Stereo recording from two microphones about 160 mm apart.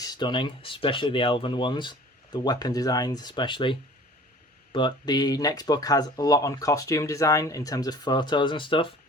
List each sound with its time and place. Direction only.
0.0 s speech: 25° left (ahead or behind)